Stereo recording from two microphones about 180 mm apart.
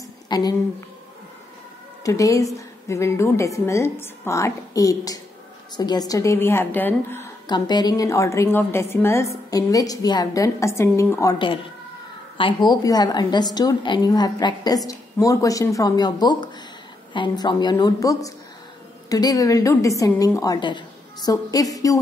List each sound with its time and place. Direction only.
0.3 s a woman's voice: 20° left (ahead or behind)
2.0 s a woman's voice: 20° left (ahead or behind)
7.4 s a woman's voice: 25° left (ahead or behind)